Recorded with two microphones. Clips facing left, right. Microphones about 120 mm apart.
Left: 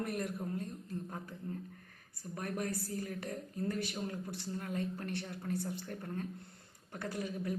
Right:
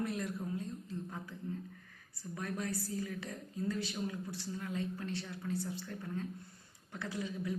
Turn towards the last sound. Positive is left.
turn(degrees=50)  # may be behind; listen again after turning